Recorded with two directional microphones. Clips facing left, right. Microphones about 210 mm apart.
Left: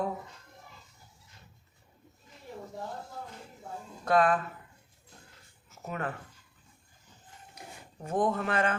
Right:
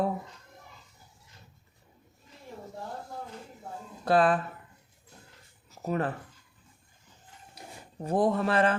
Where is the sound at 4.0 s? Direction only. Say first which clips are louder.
Right 2 dB; 30° right (ahead or behind).